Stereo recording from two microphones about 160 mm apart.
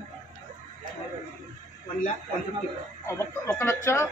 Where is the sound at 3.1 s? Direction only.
15° left (ahead or behind).